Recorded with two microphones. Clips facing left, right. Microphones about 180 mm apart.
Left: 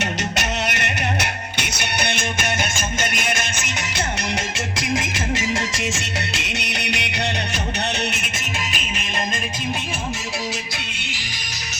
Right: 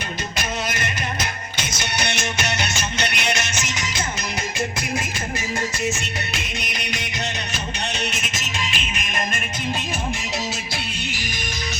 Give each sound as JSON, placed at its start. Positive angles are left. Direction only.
{"t": 0.0, "sound": "music", "side_deg": 70}
{"t": 4.8, "sound": "music", "side_deg": 90}